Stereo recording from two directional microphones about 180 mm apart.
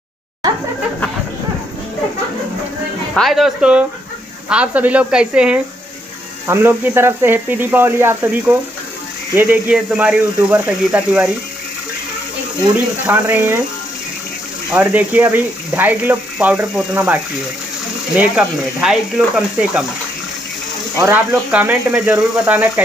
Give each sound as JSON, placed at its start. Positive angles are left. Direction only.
{"t": 3.2, "sound": "speech", "side_deg": 0}
{"t": 12.7, "sound": "speech", "side_deg": -10}
{"t": 14.7, "sound": "speech", "side_deg": -10}
{"t": 21.0, "sound": "speech", "side_deg": -10}